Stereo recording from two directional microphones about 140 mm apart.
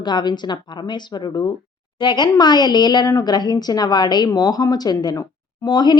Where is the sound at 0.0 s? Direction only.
30° left (ahead or behind).